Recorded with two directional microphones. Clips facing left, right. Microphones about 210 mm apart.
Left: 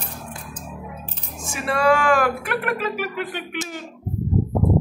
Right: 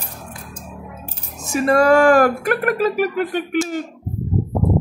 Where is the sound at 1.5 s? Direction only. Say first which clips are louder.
Right 6 dB; 45° right (ahead or behind).